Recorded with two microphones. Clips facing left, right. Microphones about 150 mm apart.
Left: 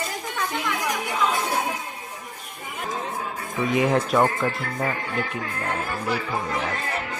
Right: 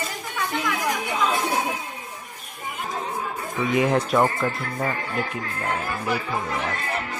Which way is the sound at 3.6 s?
Centre (ahead or behind).